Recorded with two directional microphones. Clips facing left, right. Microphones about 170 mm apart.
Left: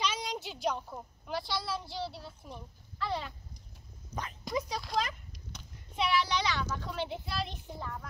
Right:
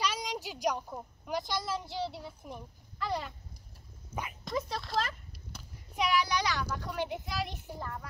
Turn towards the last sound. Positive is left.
turn(degrees=-10)  # may be behind; listen again after turning